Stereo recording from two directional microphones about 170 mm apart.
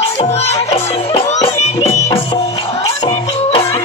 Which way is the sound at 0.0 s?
35° left (ahead or behind).